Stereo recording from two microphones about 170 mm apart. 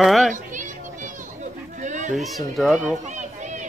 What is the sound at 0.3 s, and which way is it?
Children playing, 50° right (ahead or behind).